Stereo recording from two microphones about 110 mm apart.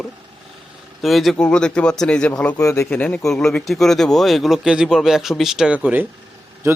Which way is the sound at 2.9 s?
15° left (ahead or behind).